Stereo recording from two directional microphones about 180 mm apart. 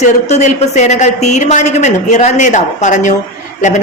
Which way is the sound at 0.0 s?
40° left (ahead or behind).